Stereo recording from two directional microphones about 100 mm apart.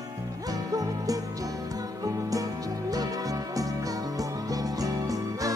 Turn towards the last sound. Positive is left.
turn(degrees=-35)  # may be behind; listen again after turning